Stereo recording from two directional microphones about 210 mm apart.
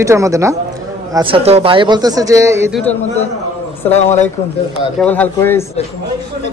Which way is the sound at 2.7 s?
Centre (ahead or behind).